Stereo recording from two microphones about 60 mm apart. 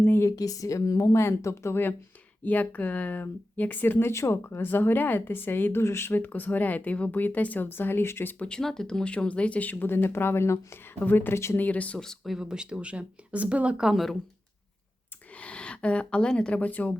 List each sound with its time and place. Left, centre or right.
0.0 s a sound: left
0.3 s speech: left
1.2 s speech: left
1.7 s speech: left
4.1 s speech: left
8.4 s speech: centre; by 10.6 s left
11.0 s speech: left
11.5 s speech: left
12.2 s speech: centre
13.9 s speech: centre
15.4 s a sound: centre
16.5 s speech: left